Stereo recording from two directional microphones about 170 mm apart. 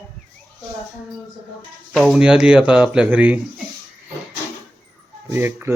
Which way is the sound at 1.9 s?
5° left (ahead or behind).